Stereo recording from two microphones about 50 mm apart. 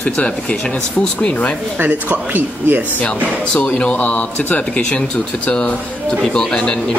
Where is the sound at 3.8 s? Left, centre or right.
Left.